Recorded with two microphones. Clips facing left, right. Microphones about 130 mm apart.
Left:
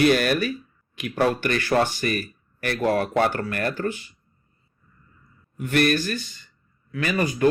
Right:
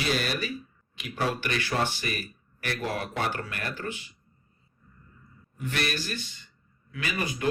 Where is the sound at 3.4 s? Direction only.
45° left (ahead or behind).